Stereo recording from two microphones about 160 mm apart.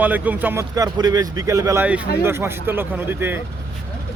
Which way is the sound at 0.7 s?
25° right (ahead or behind).